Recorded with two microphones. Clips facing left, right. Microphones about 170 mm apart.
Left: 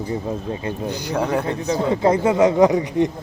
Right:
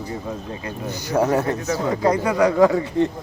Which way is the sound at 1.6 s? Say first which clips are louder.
Left 5 dB; 20° left (ahead or behind).